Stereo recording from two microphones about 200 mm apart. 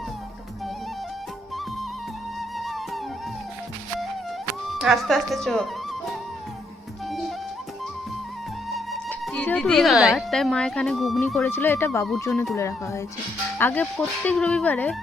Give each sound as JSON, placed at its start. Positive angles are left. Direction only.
{"t": 4.7, "sound": "speech", "side_deg": 0}
{"t": 7.1, "sound": "music", "side_deg": 0}
{"t": 8.7, "sound": "speech", "side_deg": 0}
{"t": 11.4, "sound": "speech", "side_deg": 10}